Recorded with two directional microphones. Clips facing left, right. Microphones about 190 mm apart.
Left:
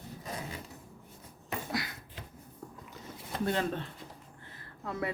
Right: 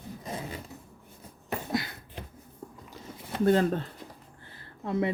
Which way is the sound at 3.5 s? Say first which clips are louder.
Right 9 dB; 40° right (ahead or behind).